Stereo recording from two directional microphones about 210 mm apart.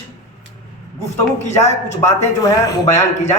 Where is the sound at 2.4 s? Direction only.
15° left (ahead or behind).